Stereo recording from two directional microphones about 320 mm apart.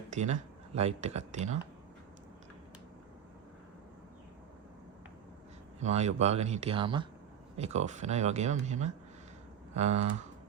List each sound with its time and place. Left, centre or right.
0.1 s speech: right
5.8 s speech: right